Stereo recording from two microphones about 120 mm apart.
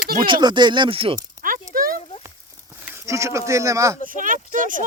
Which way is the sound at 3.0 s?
25° right (ahead or behind).